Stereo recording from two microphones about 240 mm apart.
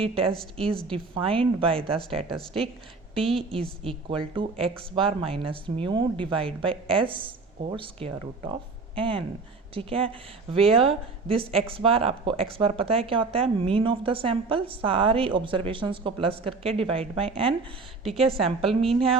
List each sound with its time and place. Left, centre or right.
0.5 s speech: right
3.2 s a woman's voice: centre
3.5 s speech: right
18.0 s a woman's voice: centre